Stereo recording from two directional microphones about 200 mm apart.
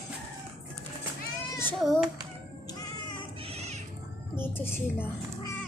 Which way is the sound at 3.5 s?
30° right (ahead or behind).